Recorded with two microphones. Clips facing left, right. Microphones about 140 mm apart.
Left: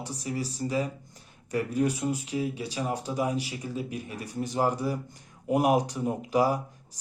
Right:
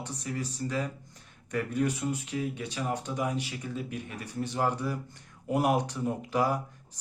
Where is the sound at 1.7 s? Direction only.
35° left (ahead or behind).